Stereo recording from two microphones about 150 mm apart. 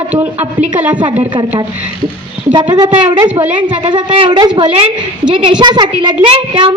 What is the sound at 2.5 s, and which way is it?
A woman's voice, 25° right (ahead or behind).